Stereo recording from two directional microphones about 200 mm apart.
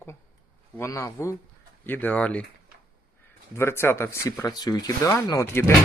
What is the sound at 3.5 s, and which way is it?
Speech, 10° left (ahead or behind).